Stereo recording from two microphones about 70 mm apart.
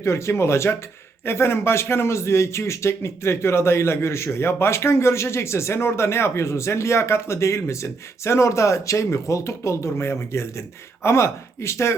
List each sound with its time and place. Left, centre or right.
0.0 s speech: left